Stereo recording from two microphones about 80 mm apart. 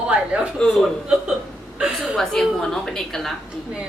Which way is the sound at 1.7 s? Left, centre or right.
Centre.